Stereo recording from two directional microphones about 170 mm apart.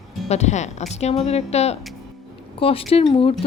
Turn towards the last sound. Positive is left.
turn(degrees=35)  # may be behind; listen again after turning